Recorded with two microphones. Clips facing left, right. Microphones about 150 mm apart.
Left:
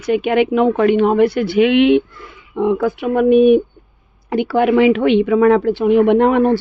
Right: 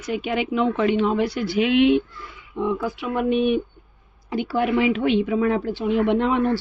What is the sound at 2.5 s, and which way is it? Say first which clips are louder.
Speech: left 8 dB; 65° left (ahead or behind).